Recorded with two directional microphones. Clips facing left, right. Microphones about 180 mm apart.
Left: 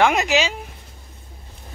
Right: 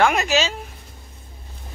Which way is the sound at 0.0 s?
20° left (ahead or behind).